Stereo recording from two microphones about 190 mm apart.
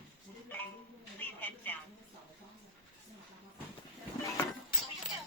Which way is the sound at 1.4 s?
10° left (ahead or behind).